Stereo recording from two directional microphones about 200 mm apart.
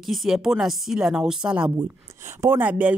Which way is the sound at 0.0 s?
Centre (ahead or behind).